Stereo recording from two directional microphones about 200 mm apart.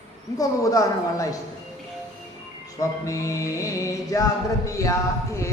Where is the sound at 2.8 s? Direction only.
15° left (ahead or behind).